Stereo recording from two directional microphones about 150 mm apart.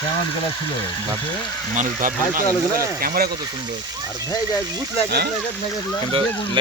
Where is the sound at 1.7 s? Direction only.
60° right (ahead or behind).